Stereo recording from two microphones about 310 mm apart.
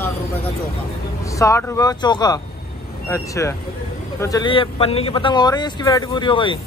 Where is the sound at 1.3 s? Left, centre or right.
Centre.